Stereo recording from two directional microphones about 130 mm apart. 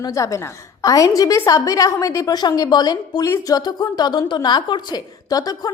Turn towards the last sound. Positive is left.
turn(degrees=30)  # may be behind; listen again after turning